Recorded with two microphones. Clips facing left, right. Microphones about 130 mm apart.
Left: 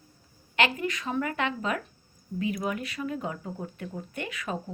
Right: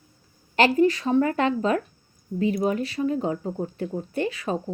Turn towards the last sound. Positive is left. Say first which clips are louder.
# right 8 dB
turn(degrees=-30)  # may be behind; listen again after turning